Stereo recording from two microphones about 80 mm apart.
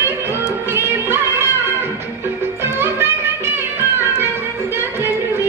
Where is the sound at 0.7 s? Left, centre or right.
Right.